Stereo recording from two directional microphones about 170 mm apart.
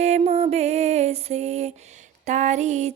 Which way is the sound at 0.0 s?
40° right (ahead or behind).